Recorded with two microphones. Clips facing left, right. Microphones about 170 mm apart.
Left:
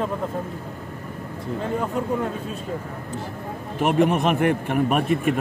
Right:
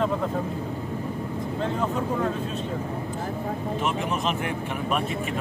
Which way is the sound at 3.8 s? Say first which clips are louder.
Left 10 dB; 60° left (ahead or behind).